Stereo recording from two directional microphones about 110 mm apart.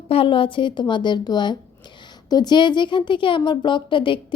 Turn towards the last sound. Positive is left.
turn(degrees=50)  # may be behind; listen again after turning